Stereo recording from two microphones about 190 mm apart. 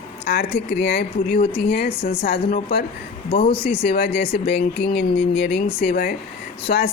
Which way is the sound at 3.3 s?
30° left (ahead or behind).